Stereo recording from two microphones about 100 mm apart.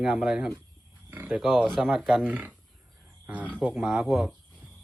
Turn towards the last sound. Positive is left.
turn(degrees=-5)  # may be behind; listen again after turning